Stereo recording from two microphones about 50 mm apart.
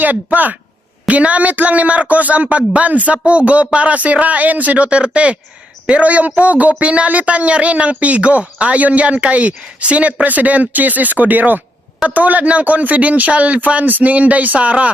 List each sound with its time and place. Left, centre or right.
1.0 s speech: right